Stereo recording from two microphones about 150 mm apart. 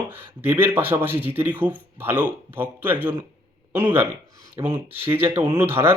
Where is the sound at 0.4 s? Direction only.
15° right (ahead or behind).